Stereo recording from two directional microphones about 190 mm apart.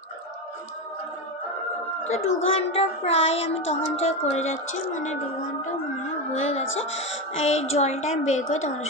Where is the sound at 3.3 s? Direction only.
85° left.